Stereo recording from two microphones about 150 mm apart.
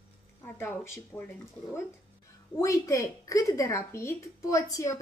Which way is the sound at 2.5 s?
20° left (ahead or behind).